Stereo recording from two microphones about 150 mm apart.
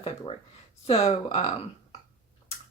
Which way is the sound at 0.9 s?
45° left (ahead or behind).